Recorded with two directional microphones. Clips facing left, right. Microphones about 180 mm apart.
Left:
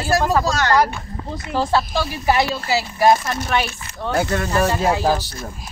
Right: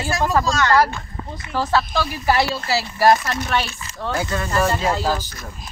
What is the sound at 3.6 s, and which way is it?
Speech, 55° left (ahead or behind).